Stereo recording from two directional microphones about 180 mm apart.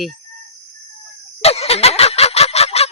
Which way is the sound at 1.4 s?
35° left (ahead or behind).